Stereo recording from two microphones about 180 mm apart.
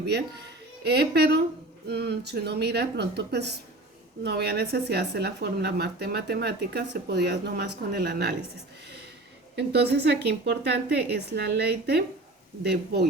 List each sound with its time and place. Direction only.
0.0 s speech: 65° right (ahead or behind)
9.6 s speech: 65° right (ahead or behind)